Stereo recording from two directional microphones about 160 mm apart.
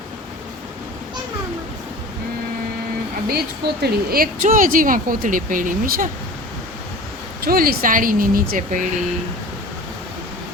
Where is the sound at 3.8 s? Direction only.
70° right (ahead or behind).